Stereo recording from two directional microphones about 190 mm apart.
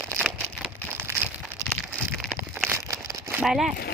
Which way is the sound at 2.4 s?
10° right (ahead or behind).